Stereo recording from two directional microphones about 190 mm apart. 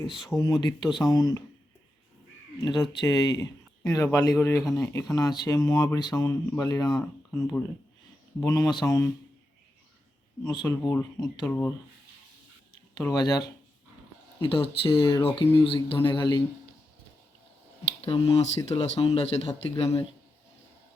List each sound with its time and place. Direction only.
0.3 s speech: 20° left (ahead or behind)
2.6 s speech: 20° left (ahead or behind)
8.4 s speech: 20° left (ahead or behind)
10.4 s speech: 20° left (ahead or behind)
13.0 s speech: 20° left (ahead or behind)
18.0 s speech: 25° left (ahead or behind)